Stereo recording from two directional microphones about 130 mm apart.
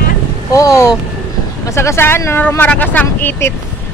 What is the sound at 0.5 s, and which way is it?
Speech, 25° left (ahead or behind).